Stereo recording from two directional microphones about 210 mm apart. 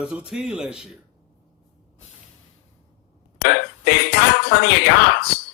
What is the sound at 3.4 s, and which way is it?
Music, 50° left (ahead or behind).